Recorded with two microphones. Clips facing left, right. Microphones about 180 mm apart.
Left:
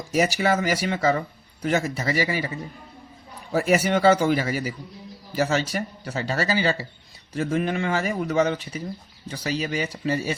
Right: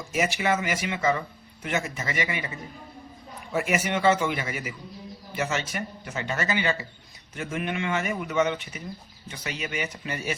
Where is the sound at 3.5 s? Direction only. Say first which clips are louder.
Left 5 dB; 35° left (ahead or behind).